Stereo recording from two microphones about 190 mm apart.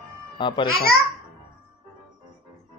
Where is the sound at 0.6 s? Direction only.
50° left (ahead or behind).